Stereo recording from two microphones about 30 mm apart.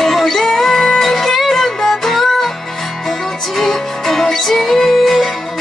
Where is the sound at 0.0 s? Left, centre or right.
Centre.